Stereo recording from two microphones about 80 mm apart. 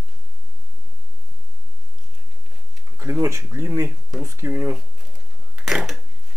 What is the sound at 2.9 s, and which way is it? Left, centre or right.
Speech, right.